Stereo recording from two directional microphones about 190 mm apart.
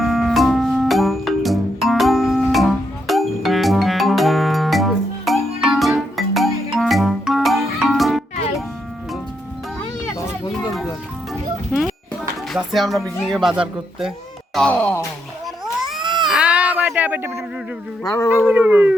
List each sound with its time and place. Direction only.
0.0 s music: centre (ahead or behind)
11.7 s music: 5° right (ahead or behind)
13.2 s speech: centre (ahead or behind)
14.5 s a sound: 5° left (ahead or behind)
16.0 s cat: 25° right (ahead or behind)
16.2 s baby cry: 5° right (ahead or behind)
18.0 s a sound: 20° left (ahead or behind)
18.4 s howl: 10° right (ahead or behind)